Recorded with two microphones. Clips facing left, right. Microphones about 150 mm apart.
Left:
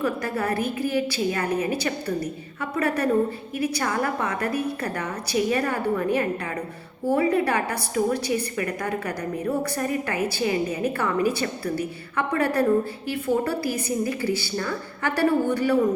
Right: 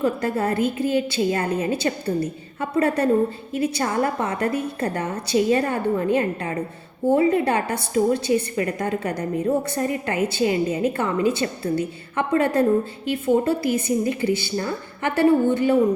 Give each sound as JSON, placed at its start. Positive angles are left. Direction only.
{"t": 0.0, "sound": "a woman's voice", "side_deg": -25}